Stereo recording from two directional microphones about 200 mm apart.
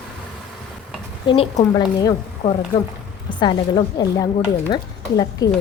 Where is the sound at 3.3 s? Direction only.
20° left (ahead or behind).